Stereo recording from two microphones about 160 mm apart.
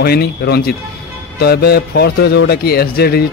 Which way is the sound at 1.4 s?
80° left.